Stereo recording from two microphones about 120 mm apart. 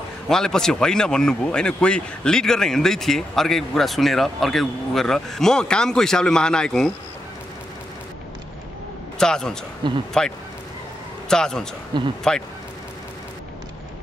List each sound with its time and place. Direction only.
0.3 s speech: 5° left (ahead or behind)
9.2 s speech: 5° left (ahead or behind)
9.8 s speech: 40° right (ahead or behind)
11.2 s speech: 5° left (ahead or behind)